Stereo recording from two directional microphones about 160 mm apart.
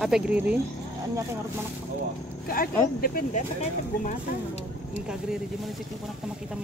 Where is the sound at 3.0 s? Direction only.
60° left (ahead or behind).